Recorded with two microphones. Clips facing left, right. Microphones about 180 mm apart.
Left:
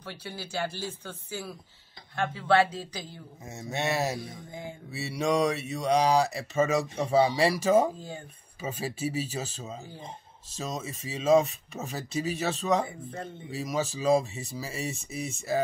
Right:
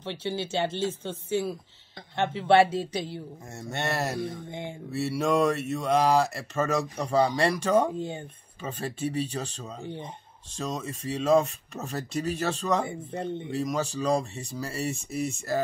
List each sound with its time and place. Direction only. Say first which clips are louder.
0.0 s speech: right 8 dB; 25° right (ahead or behind)
3.5 s speech: left 1 dB; centre (ahead or behind)
4.5 s speech: right 3 dB; 25° right (ahead or behind)
4.9 s speech: right 2 dB; centre (ahead or behind)
8.0 s speech: right 7 dB; 25° right (ahead or behind)
8.5 s speech: even; 5° left (ahead or behind)
12.8 s speech: right 5 dB; 25° right (ahead or behind)
13.5 s speech: left 1 dB; centre (ahead or behind)